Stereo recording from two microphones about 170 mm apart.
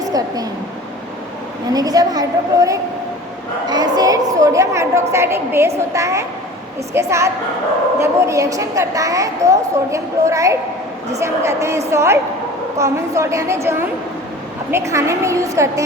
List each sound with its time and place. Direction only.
0.0 s a woman's voice: 20° right (ahead or behind)
1.7 s a woman's voice: 20° right (ahead or behind)
3.7 s a woman's voice: 25° right (ahead or behind)